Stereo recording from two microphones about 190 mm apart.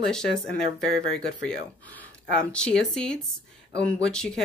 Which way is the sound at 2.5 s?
5° left (ahead or behind).